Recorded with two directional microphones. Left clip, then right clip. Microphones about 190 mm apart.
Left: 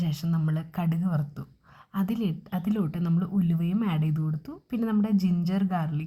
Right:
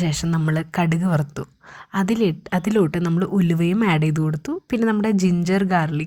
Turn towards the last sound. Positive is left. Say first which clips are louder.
# right 10 dB
turn(degrees=-25)  # may be behind; listen again after turning